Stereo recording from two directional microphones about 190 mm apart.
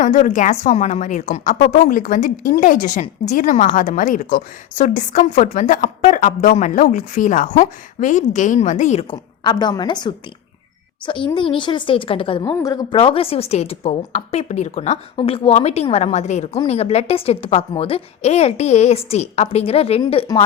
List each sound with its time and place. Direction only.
0.0 s a woman's voice: 45° left (ahead or behind)
9.1 s a woman's voice: 20° left (ahead or behind)